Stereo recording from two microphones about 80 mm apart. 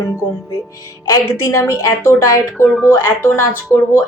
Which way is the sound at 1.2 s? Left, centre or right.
Left.